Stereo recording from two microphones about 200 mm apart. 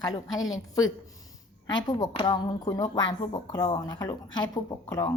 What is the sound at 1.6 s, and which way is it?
A woman's voice, 20° left (ahead or behind).